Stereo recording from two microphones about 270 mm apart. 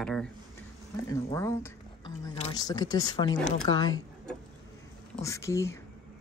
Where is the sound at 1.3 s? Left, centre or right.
Centre.